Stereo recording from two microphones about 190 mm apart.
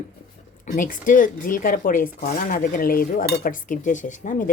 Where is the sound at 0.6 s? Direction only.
45° left (ahead or behind).